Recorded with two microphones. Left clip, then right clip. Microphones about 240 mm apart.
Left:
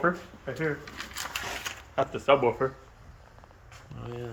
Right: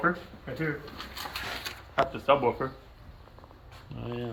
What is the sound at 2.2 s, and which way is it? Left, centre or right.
Speech, left.